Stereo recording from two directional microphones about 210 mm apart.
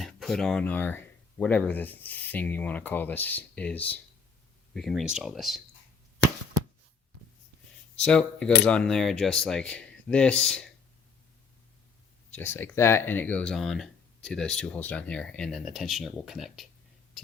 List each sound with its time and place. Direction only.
0.0 s speech: centre (ahead or behind)
8.0 s speech: 5° left (ahead or behind)
12.3 s speech: 10° left (ahead or behind)